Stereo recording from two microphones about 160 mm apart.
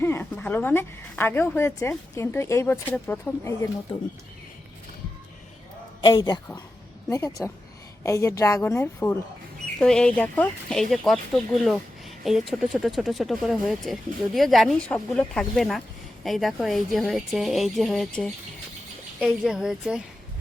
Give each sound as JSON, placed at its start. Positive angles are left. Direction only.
{"t": 0.0, "sound": "a woman's voice", "side_deg": 15}
{"t": 6.0, "sound": "a woman's voice", "side_deg": 30}
{"t": 9.8, "sound": "speech", "side_deg": 5}
{"t": 12.2, "sound": "speech", "side_deg": 0}